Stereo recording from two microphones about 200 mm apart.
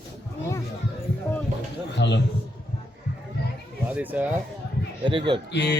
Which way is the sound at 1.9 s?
60° left (ahead or behind).